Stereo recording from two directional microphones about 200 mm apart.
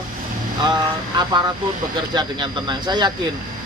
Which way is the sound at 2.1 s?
20° right (ahead or behind).